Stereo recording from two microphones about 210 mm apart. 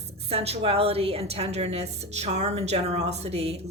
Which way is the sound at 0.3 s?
30° right (ahead or behind).